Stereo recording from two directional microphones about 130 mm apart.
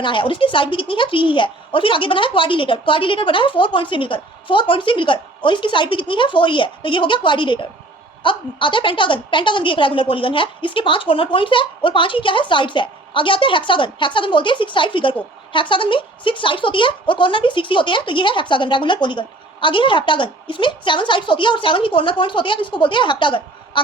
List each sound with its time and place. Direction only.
0.0 s speech: 40° left (ahead or behind)